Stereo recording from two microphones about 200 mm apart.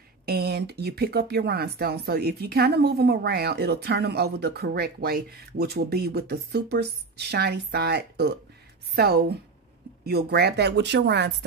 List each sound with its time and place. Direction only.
0.2 s speech: 50° right (ahead or behind)